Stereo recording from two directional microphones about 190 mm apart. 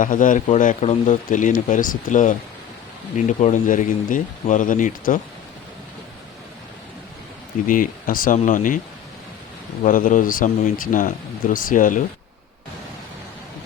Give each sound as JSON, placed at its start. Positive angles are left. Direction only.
{"t": 0.0, "sound": "speech", "side_deg": 45}
{"t": 7.7, "sound": "speech", "side_deg": 45}
{"t": 9.8, "sound": "speech", "side_deg": 45}